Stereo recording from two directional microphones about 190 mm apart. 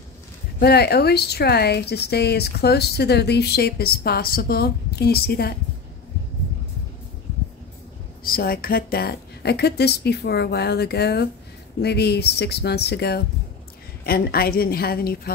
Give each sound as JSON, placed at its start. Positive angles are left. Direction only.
{"t": 0.6, "sound": "a woman's voice", "side_deg": 55}
{"t": 8.2, "sound": "a woman's voice", "side_deg": 50}